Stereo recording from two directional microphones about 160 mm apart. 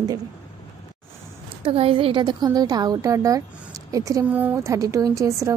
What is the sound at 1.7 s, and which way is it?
A woman's voice, 35° right (ahead or behind).